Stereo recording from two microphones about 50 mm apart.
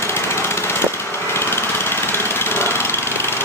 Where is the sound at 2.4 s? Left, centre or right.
Left.